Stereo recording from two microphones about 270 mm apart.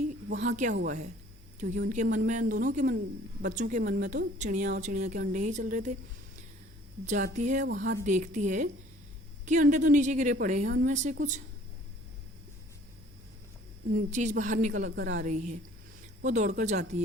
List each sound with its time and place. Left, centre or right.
0.3 s a woman's voice: right
0.7 s a woman's voice: right
1.5 s a woman's voice: right
7.0 s a woman's voice: right
13.9 s a woman's voice: right